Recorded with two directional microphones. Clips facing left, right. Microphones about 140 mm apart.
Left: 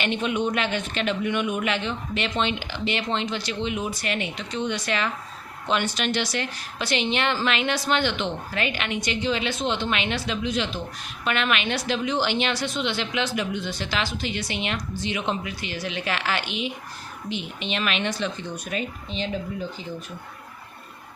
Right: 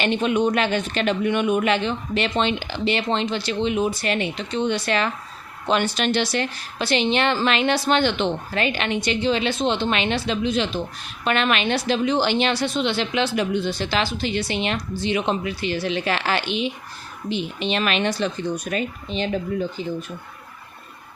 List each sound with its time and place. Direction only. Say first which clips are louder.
0.0 s a woman's voice: right 5 dB; 35° right (ahead or behind); by 19.4 s 60° right (ahead or behind)